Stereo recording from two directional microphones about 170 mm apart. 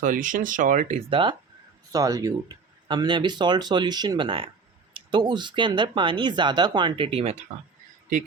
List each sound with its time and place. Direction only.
0.0 s speech: 50° right (ahead or behind)
0.9 s speech: 30° right (ahead or behind)